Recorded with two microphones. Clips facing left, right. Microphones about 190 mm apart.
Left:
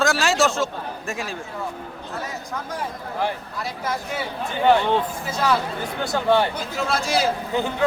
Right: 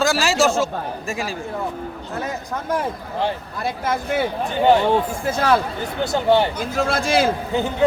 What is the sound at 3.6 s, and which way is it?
Speech, 55° right (ahead or behind).